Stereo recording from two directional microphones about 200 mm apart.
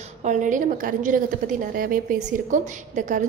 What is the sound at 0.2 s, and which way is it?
A woman's voice, 40° right (ahead or behind).